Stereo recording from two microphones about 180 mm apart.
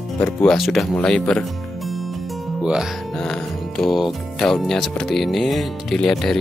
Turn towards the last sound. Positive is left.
turn(degrees=0)  # may be behind; listen again after turning